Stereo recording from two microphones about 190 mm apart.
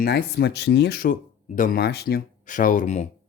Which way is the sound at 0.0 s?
55° left (ahead or behind).